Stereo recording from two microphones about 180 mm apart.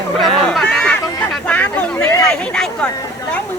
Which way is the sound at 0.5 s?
5° left (ahead or behind).